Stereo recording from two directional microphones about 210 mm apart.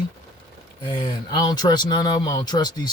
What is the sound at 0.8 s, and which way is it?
Speech, 20° left (ahead or behind).